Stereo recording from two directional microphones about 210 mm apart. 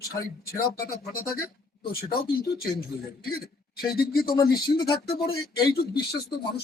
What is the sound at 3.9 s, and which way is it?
Speech, 45° left (ahead or behind).